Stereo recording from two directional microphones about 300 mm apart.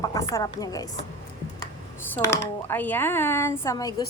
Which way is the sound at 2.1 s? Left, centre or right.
Centre.